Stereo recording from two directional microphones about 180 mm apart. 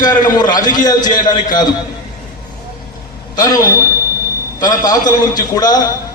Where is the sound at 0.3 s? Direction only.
20° left (ahead or behind).